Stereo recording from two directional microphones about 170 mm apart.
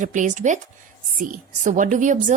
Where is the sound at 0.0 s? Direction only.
45° right (ahead or behind).